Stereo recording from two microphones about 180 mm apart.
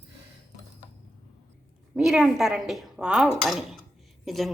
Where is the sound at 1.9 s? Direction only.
5° right (ahead or behind).